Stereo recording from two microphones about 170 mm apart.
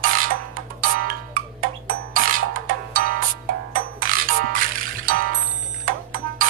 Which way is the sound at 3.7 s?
55° right (ahead or behind).